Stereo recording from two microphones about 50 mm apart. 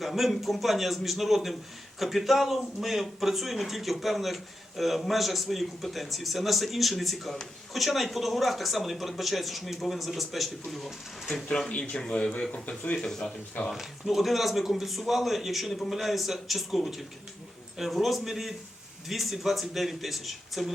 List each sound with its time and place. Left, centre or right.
0.0 s speech: centre
11.7 s speech: left
12.6 s speech: left
13.0 s speech: centre
13.7 s speech: centre